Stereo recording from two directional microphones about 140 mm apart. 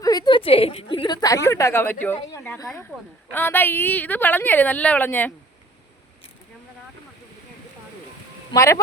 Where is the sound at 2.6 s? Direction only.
25° left (ahead or behind).